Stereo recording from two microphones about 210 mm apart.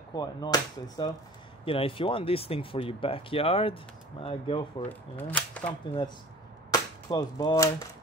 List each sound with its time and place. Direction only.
0.1 s speech: 20° left (ahead or behind)
4.8 s speech: 5° left (ahead or behind)
6.7 s cap gun: 15° left (ahead or behind)